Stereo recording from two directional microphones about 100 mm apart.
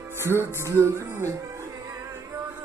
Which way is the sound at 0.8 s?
25° right (ahead or behind).